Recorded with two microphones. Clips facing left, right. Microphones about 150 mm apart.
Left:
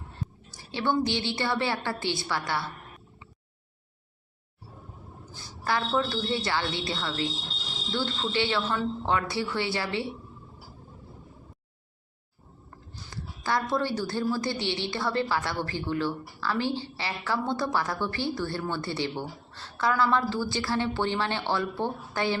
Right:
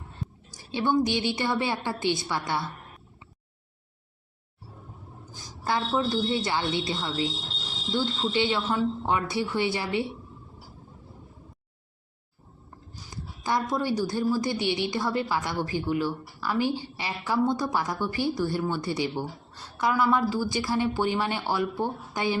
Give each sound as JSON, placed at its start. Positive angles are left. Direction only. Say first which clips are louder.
{"t": 0.7, "sound": "a woman's voice", "louder": "right 2 dB", "side_deg": -15}
{"t": 5.3, "sound": "a woman's voice", "louder": "right 1 dB", "side_deg": -15}
{"t": 13.1, "sound": "a woman's voice", "louder": "right 1 dB", "side_deg": -20}